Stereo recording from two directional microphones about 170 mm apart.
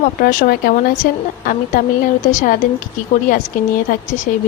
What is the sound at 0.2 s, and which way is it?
Speech, 60° left (ahead or behind).